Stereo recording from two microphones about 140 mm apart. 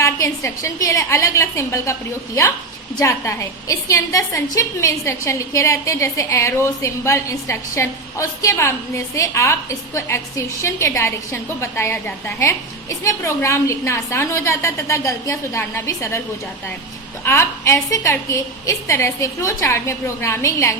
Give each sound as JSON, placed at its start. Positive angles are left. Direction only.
{"t": 0.0, "sound": "a woman's voice", "side_deg": 20}
{"t": 17.2, "sound": "a woman's voice", "side_deg": 20}